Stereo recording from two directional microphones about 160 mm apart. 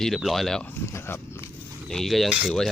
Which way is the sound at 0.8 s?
15° left (ahead or behind).